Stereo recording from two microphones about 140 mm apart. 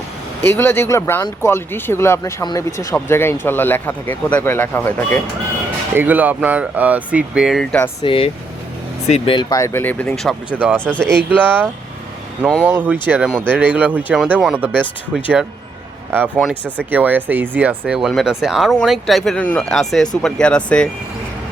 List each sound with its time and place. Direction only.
0.4 s speech: 15° left (ahead or behind)
5.9 s speech: 15° right (ahead or behind)
8.0 s speech: 40° left (ahead or behind)
9.0 s speech: 50° left (ahead or behind)
9.3 s speech: 35° left (ahead or behind)
9.6 s speech: 20° left (ahead or behind)
12.6 s speech: 10° right (ahead or behind); by 20.9 s 5° left (ahead or behind)